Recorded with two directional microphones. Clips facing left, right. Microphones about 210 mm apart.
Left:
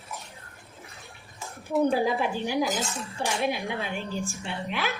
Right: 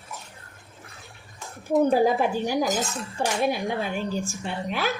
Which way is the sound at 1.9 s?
45° right (ahead or behind).